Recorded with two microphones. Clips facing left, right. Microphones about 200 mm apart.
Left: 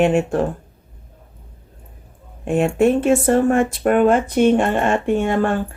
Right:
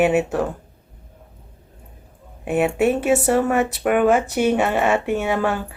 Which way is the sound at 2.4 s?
5° right (ahead or behind).